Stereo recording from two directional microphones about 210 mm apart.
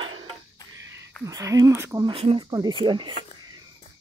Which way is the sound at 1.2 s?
15° right (ahead or behind).